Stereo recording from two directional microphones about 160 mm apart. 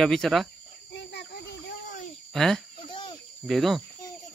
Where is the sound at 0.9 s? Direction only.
90° left.